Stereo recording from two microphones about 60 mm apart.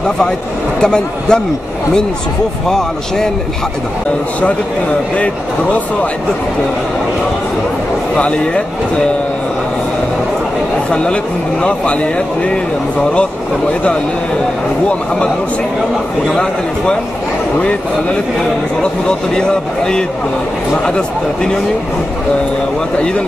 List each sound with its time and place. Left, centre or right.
0.7 s a man's voice: centre
5.1 s speech: left
10.9 s speech: centre
18.8 s a man's voice: centre